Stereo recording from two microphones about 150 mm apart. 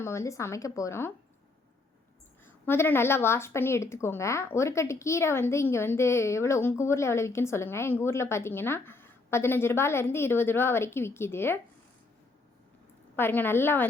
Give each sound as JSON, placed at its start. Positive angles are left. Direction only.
{"t": 0.0, "sound": "speech", "side_deg": 20}
{"t": 2.4, "sound": "a woman's voice", "side_deg": 15}
{"t": 13.1, "sound": "a woman's voice", "side_deg": 15}